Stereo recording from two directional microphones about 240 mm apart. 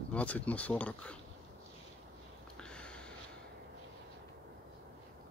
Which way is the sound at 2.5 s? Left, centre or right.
Centre.